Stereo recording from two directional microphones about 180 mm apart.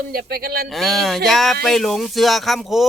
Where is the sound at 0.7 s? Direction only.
Centre (ahead or behind).